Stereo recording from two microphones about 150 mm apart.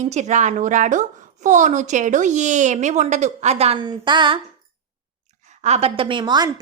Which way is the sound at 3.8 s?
30° right (ahead or behind).